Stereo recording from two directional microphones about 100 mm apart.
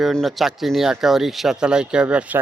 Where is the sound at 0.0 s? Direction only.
Centre (ahead or behind).